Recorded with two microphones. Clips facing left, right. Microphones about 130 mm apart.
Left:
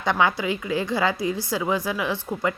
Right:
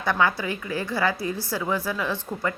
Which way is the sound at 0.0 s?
20° left (ahead or behind).